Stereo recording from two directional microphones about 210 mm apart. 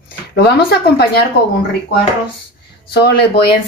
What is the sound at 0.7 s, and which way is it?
Speech, 50° left (ahead or behind).